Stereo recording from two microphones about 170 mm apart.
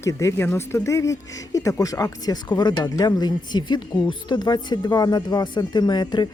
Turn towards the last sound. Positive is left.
turn(degrees=25)  # may be behind; listen again after turning